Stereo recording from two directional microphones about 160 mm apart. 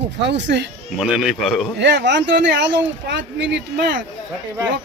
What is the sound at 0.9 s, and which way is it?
Speech, 5° right (ahead or behind).